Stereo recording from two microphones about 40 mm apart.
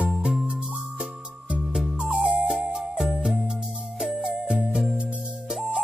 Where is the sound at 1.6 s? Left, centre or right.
Centre.